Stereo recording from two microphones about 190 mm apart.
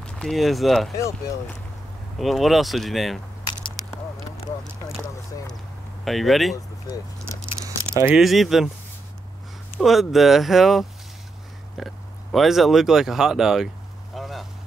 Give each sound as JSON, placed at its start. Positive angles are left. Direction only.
{"t": 0.0, "sound": "speech", "side_deg": 0}
{"t": 0.9, "sound": "speech", "side_deg": 15}
{"t": 2.1, "sound": "speech", "side_deg": 0}
{"t": 6.0, "sound": "speech", "side_deg": 0}
{"t": 7.6, "sound": "keys jangling", "side_deg": -15}
{"t": 8.1, "sound": "speech", "side_deg": 0}
{"t": 9.8, "sound": "speech", "side_deg": 0}
{"t": 14.1, "sound": "vehicle", "side_deg": 0}